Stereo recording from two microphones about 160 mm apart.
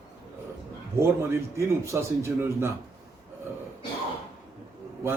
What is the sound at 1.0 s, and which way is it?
A man's voice, 15° right (ahead or behind).